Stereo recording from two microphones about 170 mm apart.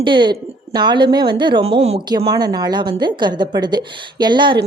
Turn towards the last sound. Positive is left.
turn(degrees=-25)  # may be behind; listen again after turning